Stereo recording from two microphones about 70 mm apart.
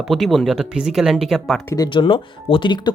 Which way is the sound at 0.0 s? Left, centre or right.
Centre.